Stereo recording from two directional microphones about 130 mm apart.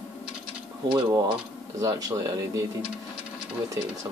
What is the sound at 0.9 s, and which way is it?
Speech, 35° right (ahead or behind).